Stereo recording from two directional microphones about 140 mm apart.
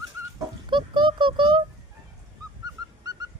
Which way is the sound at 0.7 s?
35° right (ahead or behind).